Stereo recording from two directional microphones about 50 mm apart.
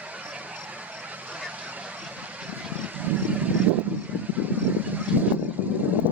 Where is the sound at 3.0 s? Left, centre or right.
Right.